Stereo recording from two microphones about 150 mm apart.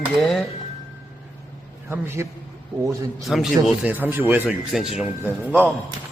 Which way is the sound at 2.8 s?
Centre (ahead or behind).